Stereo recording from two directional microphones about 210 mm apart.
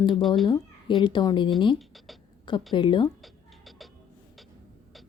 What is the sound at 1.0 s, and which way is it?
Speech, 20° left (ahead or behind).